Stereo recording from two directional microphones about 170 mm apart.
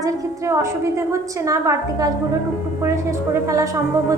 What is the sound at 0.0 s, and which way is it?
A woman's voice, 15° right (ahead or behind).